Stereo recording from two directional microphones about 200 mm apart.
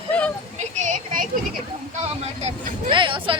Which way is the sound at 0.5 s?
35° right (ahead or behind).